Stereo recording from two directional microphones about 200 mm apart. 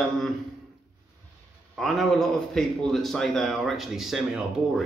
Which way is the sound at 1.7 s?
Centre (ahead or behind).